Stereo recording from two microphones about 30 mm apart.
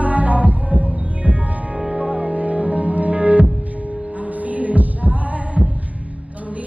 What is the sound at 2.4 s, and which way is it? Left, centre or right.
Music, right.